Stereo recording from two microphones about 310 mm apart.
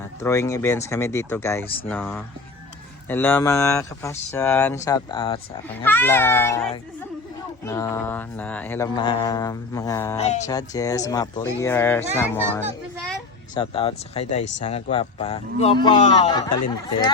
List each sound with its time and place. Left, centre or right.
0.2 s speech: centre
10.2 s a man's voice: left
13.5 s a man's voice: centre